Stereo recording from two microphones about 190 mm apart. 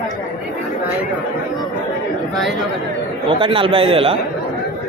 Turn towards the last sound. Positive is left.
turn(degrees=-30)  # may be behind; listen again after turning